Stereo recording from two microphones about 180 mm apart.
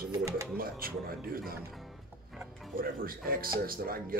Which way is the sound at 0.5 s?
55° right (ahead or behind).